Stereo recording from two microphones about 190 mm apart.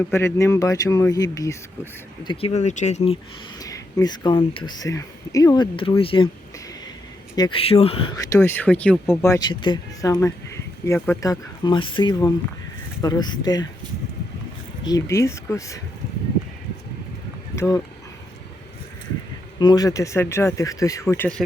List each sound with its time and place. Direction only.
0.1 s speech: 15° left (ahead or behind); by 3.2 s 35° left (ahead or behind)
3.6 s speech: 20° left (ahead or behind)
7.3 s speech: 25° left (ahead or behind)
14.8 s speech: 15° left (ahead or behind)
17.5 s speech: 15° left (ahead or behind)
19.5 s speech: 20° left (ahead or behind)